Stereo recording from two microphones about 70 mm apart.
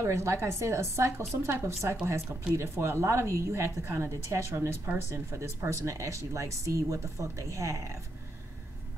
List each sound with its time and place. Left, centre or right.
0.0 s a woman's voice: right